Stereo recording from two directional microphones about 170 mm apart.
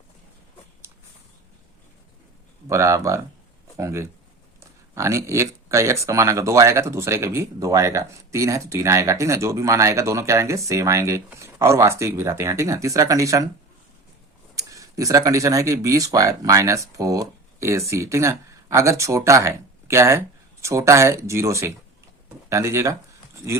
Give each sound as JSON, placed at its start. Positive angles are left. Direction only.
{"t": 2.6, "sound": "speech", "side_deg": -20}
{"t": 14.5, "sound": "speech", "side_deg": -20}